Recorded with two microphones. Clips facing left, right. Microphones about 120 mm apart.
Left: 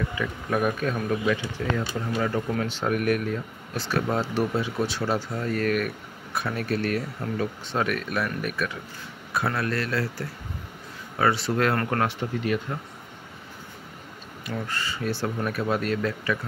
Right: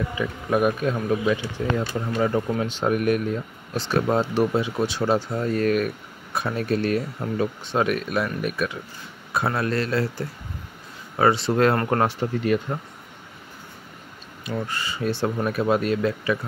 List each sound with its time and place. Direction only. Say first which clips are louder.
0.2 s speech: right 5 dB; 20° right (ahead or behind); by 12.5 s 35° right (ahead or behind)
14.4 s speech: right 3 dB; 15° right (ahead or behind)